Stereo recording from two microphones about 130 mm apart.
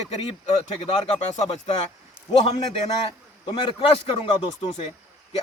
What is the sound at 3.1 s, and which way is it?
A man's voice, 35° left (ahead or behind).